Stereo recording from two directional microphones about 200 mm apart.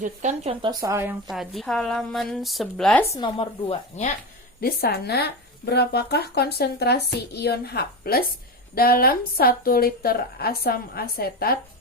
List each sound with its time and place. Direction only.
0.0 s speech: 35° right (ahead or behind)
0.6 s speech: 20° right (ahead or behind)
1.3 s a woman's voice: centre (ahead or behind)
3.1 s speech: 20° left (ahead or behind)
4.6 s a woman's voice: 50° left (ahead or behind)